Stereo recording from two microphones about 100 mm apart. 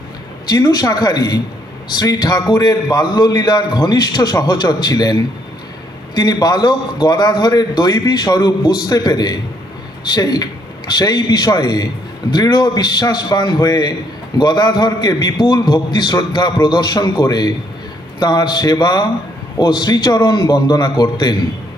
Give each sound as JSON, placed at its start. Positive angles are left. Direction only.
{"t": 0.5, "sound": "a man's voice", "side_deg": 40}